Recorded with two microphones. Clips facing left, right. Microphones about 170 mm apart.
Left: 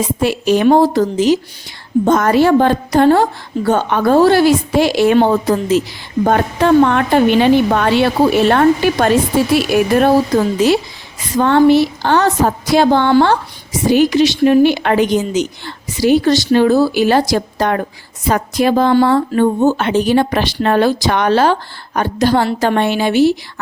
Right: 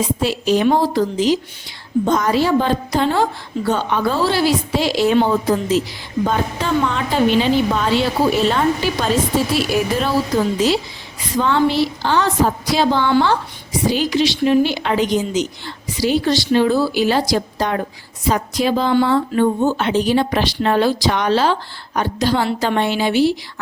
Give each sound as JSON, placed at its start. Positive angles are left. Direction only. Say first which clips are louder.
{"t": 0.2, "sound": "a woman's voice", "louder": "left 5 dB", "side_deg": 60}
{"t": 11.3, "sound": "a woman's voice", "louder": "left 6 dB", "side_deg": 55}